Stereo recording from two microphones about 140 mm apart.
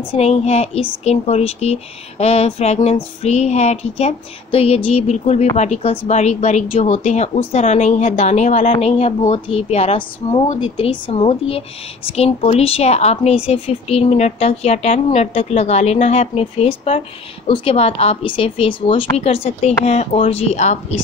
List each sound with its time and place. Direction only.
0.0 s speech: 45° left (ahead or behind)